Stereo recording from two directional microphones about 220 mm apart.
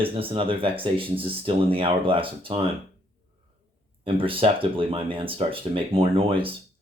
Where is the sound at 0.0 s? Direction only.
25° right (ahead or behind).